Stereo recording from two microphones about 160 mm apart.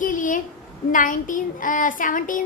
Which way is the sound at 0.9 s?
55° left (ahead or behind).